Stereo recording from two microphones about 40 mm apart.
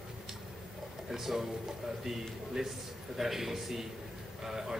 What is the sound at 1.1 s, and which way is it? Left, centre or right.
A man's voice, centre.